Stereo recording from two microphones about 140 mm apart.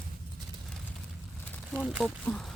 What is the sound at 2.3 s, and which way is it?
Speech, 5° left (ahead or behind).